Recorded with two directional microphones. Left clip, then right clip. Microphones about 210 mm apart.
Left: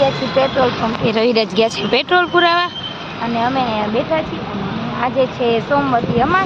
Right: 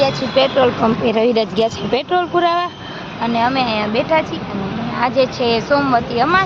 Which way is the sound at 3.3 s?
15° right (ahead or behind).